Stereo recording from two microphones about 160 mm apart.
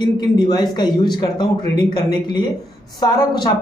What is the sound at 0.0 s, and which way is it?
Speech, 25° left (ahead or behind).